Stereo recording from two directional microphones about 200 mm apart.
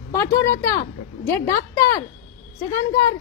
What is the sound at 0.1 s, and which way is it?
A woman's voice, 15° left (ahead or behind).